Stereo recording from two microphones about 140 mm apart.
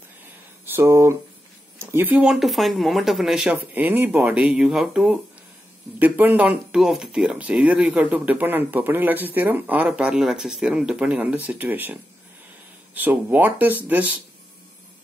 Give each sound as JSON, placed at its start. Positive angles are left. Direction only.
{"t": 0.7, "sound": "speech", "side_deg": -20}